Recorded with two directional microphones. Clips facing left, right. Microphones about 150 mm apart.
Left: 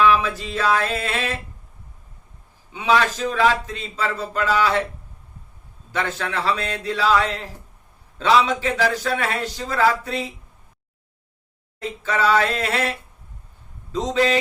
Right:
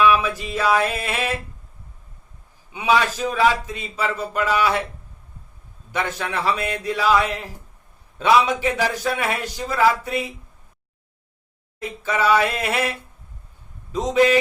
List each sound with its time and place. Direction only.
0.0 s a man's voice: 15° right (ahead or behind)
2.7 s a man's voice: 10° right (ahead or behind)
5.9 s a man's voice: 15° right (ahead or behind)
11.8 s a man's voice: 15° right (ahead or behind)